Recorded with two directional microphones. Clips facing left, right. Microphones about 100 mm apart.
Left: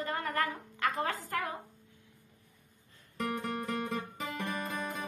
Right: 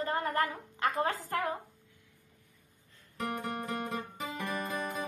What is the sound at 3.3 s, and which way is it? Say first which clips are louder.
Music: left 1 dB; 10° right (ahead or behind).